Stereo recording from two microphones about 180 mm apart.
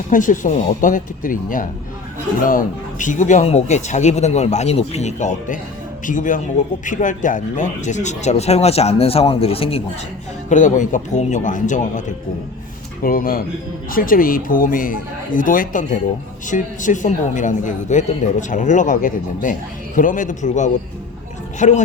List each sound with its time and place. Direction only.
0.1 s a man's voice: 45° left (ahead or behind)
10.5 s a man's voice: 45° left (ahead or behind)